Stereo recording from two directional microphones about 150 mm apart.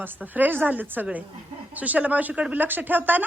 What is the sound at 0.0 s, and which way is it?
A woman's voice, 10° right (ahead or behind).